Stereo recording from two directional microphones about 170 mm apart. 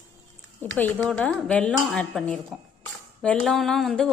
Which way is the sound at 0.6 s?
10° left (ahead or behind).